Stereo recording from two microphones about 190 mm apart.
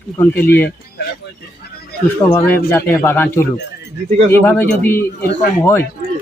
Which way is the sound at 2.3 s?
10° left (ahead or behind).